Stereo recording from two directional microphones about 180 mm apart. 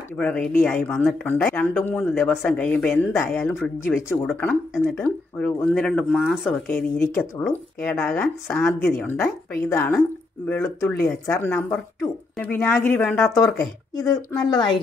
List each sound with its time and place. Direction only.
0.2 s speech: 5° left (ahead or behind); by 14.7 s 25° left (ahead or behind)